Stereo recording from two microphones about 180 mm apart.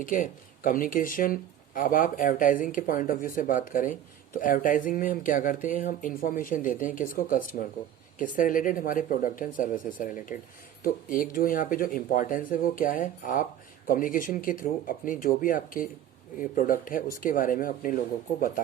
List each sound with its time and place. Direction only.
0.0 s speech: 50° left (ahead or behind)